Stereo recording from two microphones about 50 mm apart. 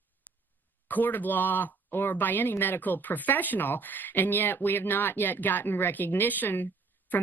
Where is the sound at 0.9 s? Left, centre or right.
Left.